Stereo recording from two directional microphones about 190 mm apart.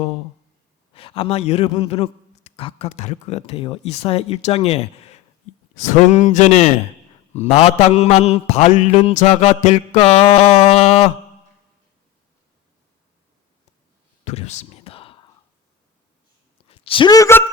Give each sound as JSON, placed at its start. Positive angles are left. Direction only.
{"t": 0.9, "sound": "a man's voice", "side_deg": 30}
{"t": 14.3, "sound": "whispering", "side_deg": 35}
{"t": 16.6, "sound": "a woman's voice", "side_deg": 30}